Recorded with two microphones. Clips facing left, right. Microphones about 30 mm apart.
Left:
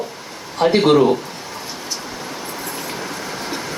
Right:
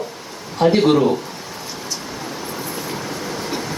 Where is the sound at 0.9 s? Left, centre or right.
Centre.